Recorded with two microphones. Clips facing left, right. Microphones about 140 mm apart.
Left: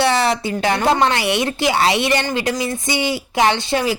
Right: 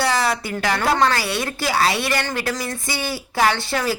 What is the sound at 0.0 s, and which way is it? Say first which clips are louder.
Speech: left 4 dB; 25° left (ahead or behind).